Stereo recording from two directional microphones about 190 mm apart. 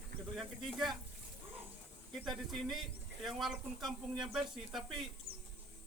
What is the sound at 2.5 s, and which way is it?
Speech, centre (ahead or behind).